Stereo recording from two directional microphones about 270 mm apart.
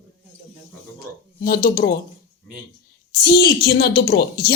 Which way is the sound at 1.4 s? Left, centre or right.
Left.